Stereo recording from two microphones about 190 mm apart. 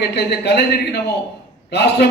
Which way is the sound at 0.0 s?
60° left (ahead or behind).